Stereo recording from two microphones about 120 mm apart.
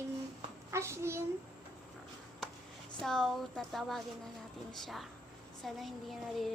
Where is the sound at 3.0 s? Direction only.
5° left (ahead or behind).